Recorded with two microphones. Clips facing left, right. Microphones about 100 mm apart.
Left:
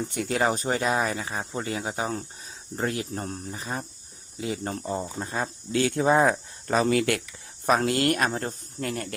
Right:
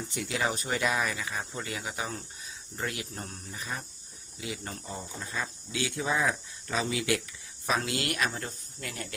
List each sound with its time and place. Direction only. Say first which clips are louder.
0.1 s speech: left 5 dB; 50° left (ahead or behind)